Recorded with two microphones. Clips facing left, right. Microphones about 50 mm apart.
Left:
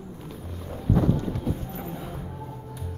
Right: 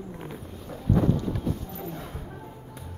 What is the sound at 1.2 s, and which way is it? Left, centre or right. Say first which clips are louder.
Music: left 1 dB; left.